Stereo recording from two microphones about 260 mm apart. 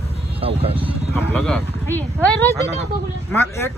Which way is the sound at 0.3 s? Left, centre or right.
Right.